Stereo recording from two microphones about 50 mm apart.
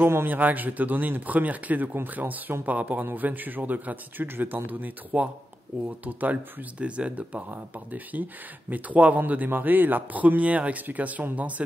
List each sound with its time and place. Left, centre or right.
0.0 s speech: right